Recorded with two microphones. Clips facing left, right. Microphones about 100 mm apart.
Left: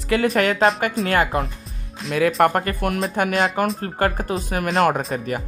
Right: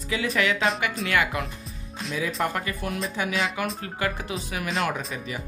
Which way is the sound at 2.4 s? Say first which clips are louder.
Left 9 dB; 55° left (ahead or behind).